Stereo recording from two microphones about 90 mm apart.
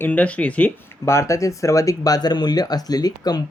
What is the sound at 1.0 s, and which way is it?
Speech, 30° left (ahead or behind).